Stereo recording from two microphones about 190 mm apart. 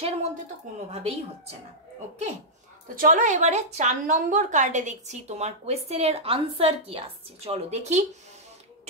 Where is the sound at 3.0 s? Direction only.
45° right (ahead or behind).